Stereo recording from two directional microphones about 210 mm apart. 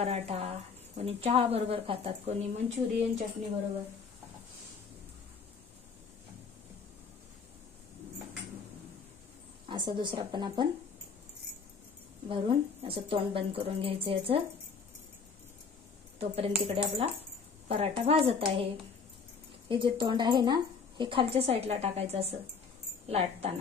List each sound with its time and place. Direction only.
0.0 s a woman's voice: 30° right (ahead or behind)
9.7 s a woman's voice: 20° right (ahead or behind)
12.3 s a woman's voice: 25° right (ahead or behind)
16.2 s a woman's voice: 30° right (ahead or behind)
19.7 s a woman's voice: 25° right (ahead or behind)